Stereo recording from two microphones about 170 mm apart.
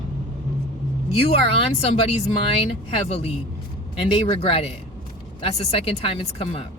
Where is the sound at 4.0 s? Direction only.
30° left (ahead or behind).